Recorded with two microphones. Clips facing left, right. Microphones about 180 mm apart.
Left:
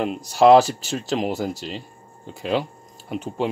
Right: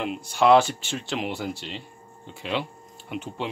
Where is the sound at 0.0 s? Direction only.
40° left (ahead or behind).